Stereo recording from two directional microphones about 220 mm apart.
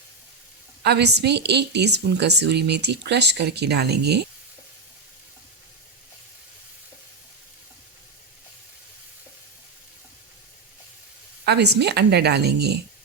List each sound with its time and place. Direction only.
0.8 s a woman's voice: 50° right (ahead or behind)
11.4 s a woman's voice: 50° right (ahead or behind)